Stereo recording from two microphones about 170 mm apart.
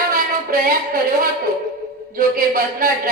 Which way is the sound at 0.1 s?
60° right (ahead or behind).